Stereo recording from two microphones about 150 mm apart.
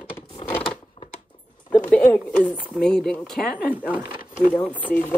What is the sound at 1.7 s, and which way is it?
A woman's voice, 5° left (ahead or behind).